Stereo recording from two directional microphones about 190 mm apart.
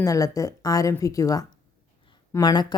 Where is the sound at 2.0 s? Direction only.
20° left (ahead or behind).